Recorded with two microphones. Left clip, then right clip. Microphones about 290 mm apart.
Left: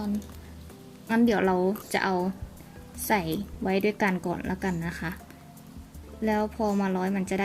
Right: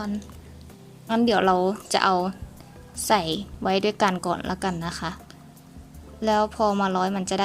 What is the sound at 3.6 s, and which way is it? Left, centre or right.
Speech, right.